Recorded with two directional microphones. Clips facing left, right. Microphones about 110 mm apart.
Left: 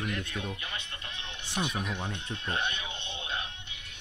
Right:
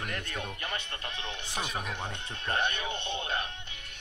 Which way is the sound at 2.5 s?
45° right (ahead or behind).